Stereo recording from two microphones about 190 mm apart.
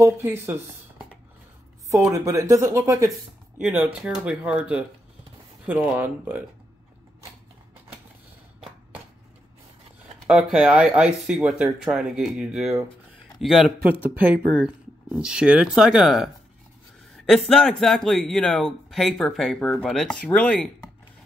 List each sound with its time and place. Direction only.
0.0 s speech: 10° right (ahead or behind)
1.9 s speech: 15° right (ahead or behind)
10.2 s speech: 5° right (ahead or behind)
17.5 s speech: 5° left (ahead or behind)